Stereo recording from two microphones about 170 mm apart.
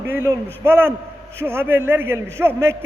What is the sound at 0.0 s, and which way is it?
A man's voice, 15° right (ahead or behind).